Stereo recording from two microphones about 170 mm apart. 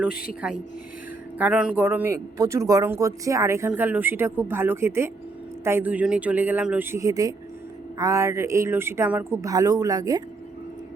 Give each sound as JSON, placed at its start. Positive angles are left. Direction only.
{"t": 0.4, "sound": "speech", "side_deg": -10}